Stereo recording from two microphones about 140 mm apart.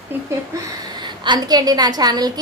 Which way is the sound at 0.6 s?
30° right (ahead or behind).